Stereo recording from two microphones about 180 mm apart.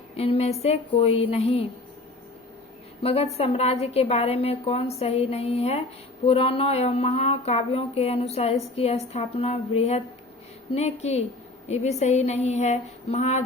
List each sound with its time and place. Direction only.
0.2 s speech: 35° left (ahead or behind)
3.0 s speech: 35° left (ahead or behind)